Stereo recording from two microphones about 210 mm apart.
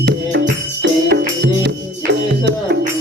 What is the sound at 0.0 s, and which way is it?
Music, 55° right (ahead or behind).